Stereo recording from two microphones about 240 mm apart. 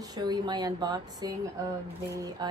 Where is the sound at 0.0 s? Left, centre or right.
Centre.